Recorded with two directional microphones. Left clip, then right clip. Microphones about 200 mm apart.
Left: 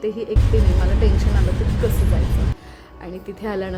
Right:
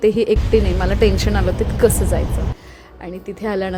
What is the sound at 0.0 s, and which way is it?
A woman's voice, 25° right (ahead or behind).